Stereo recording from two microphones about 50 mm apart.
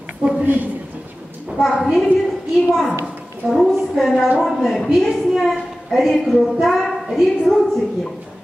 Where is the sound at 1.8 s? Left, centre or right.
Centre.